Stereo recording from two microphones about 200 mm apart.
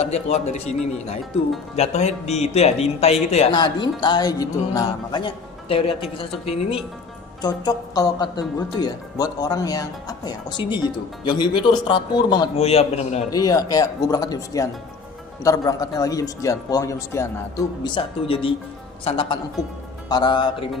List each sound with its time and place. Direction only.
0.0 s speech: 35° left (ahead or behind)
13.3 s a man's voice: 20° left (ahead or behind)